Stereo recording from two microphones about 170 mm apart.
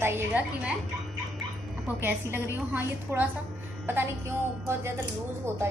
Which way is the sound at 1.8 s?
10° right (ahead or behind).